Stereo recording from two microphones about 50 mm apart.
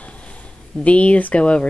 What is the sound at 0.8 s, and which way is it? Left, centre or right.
Speech, left.